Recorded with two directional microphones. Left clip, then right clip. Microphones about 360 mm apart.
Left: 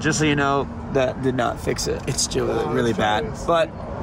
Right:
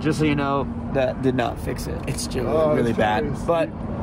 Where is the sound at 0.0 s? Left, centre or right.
Centre.